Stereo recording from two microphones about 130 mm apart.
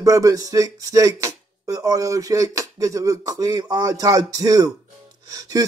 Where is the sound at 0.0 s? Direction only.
25° right (ahead or behind).